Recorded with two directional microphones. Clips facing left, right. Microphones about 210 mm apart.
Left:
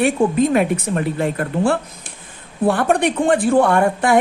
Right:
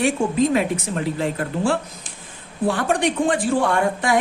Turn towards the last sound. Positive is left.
turn(degrees=55)  # may be behind; listen again after turning